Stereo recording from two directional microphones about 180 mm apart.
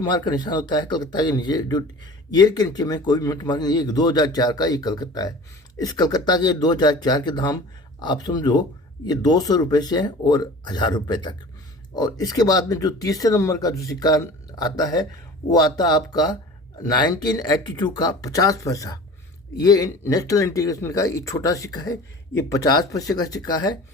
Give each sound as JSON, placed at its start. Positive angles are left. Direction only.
{"t": 0.0, "sound": "speech", "side_deg": 25}